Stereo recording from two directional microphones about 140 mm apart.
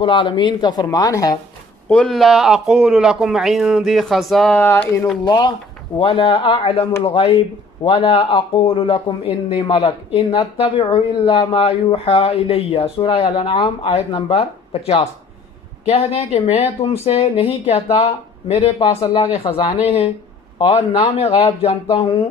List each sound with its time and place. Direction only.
0.0 s speech: 35° left (ahead or behind)
1.9 s speech: 5° left (ahead or behind)
4.6 s speech: 15° left (ahead or behind)
5.2 s speech: 30° left (ahead or behind)